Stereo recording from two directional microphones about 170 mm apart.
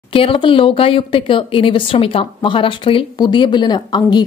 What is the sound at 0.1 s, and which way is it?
Speech, 30° left (ahead or behind).